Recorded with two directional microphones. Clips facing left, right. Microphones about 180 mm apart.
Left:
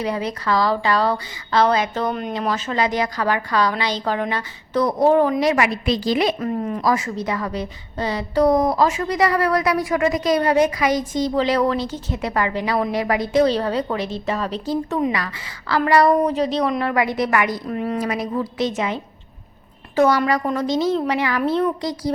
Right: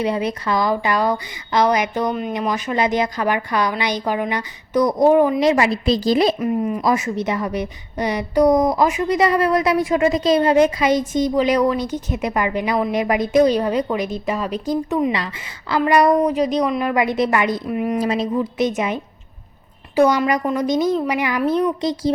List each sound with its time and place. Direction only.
0.0 s a woman's voice: 20° right (ahead or behind)
5.4 s a woman's voice: 25° right (ahead or behind)
6.4 s a woman's voice: 10° right (ahead or behind)
6.8 s a woman's voice: 20° right (ahead or behind)
17.7 s a woman's voice: 10° right (ahead or behind)
18.0 s a woman's voice: 30° right (ahead or behind)